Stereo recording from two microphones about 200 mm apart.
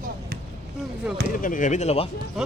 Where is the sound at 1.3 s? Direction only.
45° left (ahead or behind).